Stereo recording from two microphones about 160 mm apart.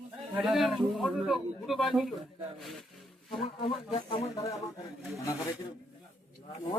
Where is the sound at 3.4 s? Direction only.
30° left (ahead or behind).